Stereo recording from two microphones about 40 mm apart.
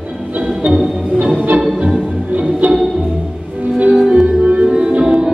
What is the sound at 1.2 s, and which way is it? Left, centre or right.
Music, right.